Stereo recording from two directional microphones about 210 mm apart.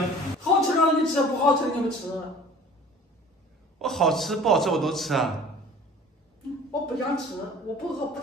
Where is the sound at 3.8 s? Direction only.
Centre (ahead or behind).